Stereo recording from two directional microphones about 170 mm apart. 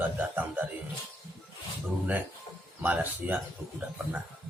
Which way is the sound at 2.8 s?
10° right (ahead or behind).